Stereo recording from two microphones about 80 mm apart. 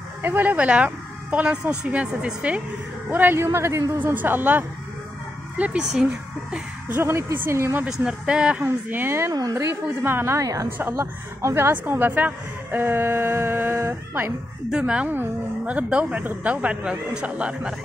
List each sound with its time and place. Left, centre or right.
0.2 s speech: right
3.1 s a man's voice: right
4.0 s a woman's voice: right
6.9 s a man's voice: right
7.8 s speech: centre
8.9 s a woman's voice: right
9.3 s a woman's voice: right
10.0 s a woman's voice: right
10.4 s a woman's voice: right
11.7 s a woman's voice: right
14.7 s speech: centre